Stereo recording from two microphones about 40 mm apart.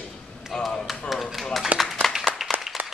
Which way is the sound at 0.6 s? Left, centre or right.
Centre.